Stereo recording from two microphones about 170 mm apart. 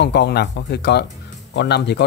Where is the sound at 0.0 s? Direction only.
85° left.